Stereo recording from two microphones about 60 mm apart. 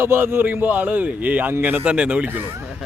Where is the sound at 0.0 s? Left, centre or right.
Right.